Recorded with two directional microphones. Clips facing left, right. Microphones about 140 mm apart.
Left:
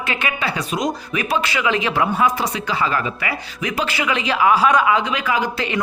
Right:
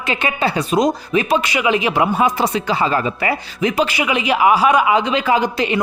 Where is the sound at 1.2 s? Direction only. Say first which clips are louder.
Even; 20° right (ahead or behind).